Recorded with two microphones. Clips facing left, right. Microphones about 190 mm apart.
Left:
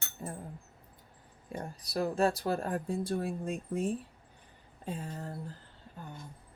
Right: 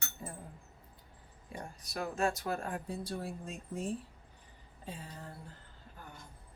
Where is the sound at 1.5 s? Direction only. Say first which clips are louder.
Left 6 dB; 35° left (ahead or behind); by 3.8 s 55° left (ahead or behind).